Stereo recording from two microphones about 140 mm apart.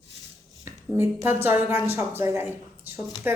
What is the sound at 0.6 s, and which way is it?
A woman's voice, 20° right (ahead or behind).